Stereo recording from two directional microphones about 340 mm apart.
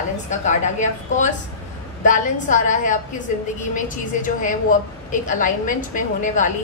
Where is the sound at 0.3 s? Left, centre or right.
Left.